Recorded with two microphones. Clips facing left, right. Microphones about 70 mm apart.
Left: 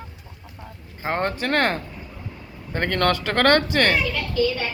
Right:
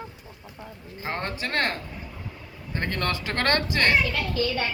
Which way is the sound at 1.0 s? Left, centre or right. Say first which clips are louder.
Left 6 dB; left.